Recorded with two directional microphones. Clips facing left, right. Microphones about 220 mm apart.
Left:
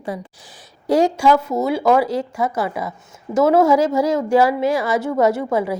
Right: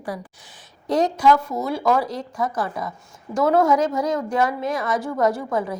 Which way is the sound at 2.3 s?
5° left (ahead or behind).